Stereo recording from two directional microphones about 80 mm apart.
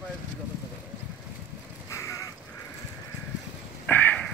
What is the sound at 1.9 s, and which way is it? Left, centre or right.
Crow, left.